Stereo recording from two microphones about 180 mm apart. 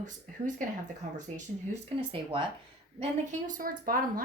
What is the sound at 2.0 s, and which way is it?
Speech, 30° right (ahead or behind).